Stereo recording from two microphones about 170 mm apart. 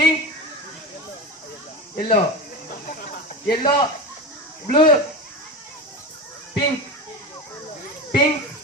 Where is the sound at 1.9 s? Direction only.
30° left (ahead or behind).